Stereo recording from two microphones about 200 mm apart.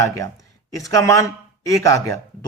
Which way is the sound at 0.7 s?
15° left (ahead or behind).